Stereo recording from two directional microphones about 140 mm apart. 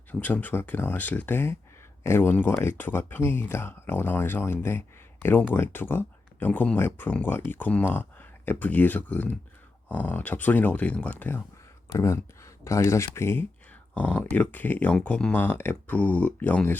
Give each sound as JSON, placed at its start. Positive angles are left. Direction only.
{"t": 0.1, "sound": "speech", "side_deg": 10}